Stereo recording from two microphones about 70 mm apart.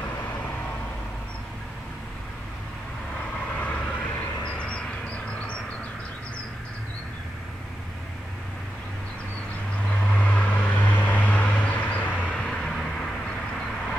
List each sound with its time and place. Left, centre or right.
3.5 s vehicle: left
4.6 s a sound: centre
9.8 s vehicle: centre